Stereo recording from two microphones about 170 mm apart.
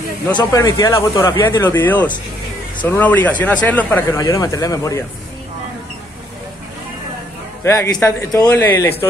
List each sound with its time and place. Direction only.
0.4 s speech: 20° left (ahead or behind)
1.6 s speech: 10° left (ahead or behind)
7.6 s speech: 15° left (ahead or behind)